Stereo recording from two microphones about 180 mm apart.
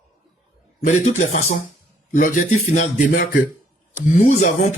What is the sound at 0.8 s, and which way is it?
Speech, 45° left (ahead or behind).